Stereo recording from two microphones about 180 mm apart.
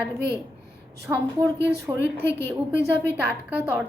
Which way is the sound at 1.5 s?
70° right (ahead or behind).